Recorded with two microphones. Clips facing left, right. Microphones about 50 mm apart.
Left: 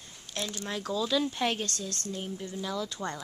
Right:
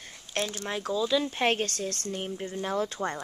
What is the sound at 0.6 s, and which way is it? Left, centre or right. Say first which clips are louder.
Speech: right 3 dB; right.